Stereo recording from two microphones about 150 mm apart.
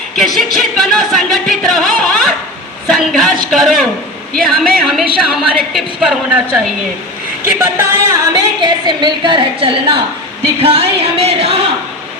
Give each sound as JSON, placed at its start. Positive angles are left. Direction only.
{"t": 0.3, "sound": "a woman's voice", "side_deg": 0}
{"t": 7.4, "sound": "music", "side_deg": -15}
{"t": 8.6, "sound": "a woman's voice", "side_deg": -30}